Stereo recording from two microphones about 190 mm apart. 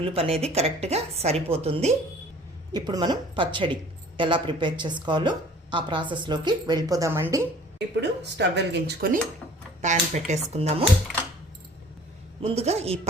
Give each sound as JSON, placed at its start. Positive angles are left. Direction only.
{"t": 0.0, "sound": "a woman's voice", "side_deg": -30}
{"t": 7.8, "sound": "speech", "side_deg": -65}
{"t": 9.8, "sound": "a woman's voice", "side_deg": -40}
{"t": 12.4, "sound": "a woman's voice", "side_deg": -35}